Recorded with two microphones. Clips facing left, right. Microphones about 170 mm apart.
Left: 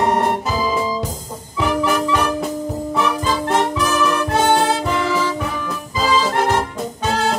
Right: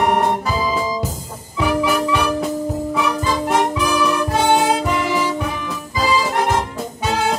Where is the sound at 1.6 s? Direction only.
10° right (ahead or behind).